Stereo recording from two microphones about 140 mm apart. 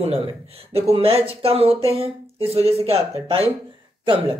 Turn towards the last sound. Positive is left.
turn(degrees=-35)  # may be behind; listen again after turning